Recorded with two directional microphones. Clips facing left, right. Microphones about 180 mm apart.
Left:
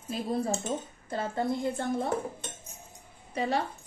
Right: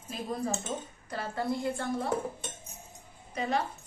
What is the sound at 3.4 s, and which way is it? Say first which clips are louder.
Speech: left 2 dB; 30° left (ahead or behind).